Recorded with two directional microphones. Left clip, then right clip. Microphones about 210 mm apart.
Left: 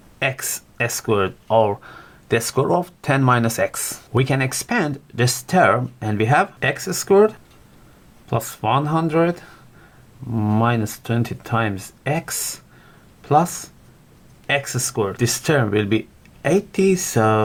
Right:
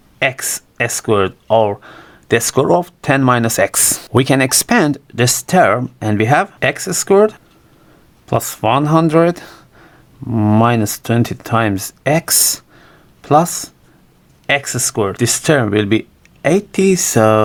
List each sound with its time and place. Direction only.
0.2 s speech: 30° right (ahead or behind)